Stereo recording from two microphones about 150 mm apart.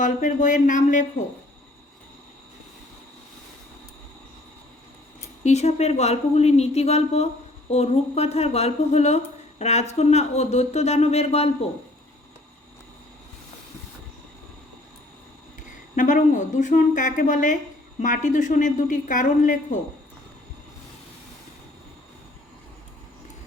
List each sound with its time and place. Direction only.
0.0 s a woman's voice: 60° left (ahead or behind)
5.4 s speech: 50° left (ahead or behind)
16.0 s a woman's voice: 55° left (ahead or behind)